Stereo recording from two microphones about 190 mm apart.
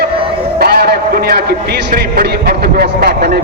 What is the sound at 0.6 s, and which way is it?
Speech, 55° right (ahead or behind).